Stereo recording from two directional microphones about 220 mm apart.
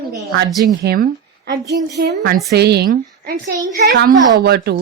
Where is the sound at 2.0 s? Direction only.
45° right (ahead or behind).